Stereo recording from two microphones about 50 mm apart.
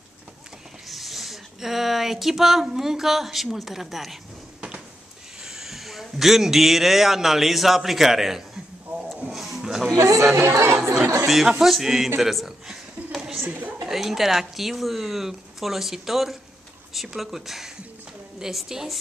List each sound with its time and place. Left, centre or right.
0.8 s speech: centre
5.4 s a man's voice: centre
9.3 s music: centre
9.9 s speech: right
10.3 s speech: right
11.2 s speech: centre
12.2 s a sound: centre
13.5 s a woman's voice: right
13.8 s a woman's voice: centre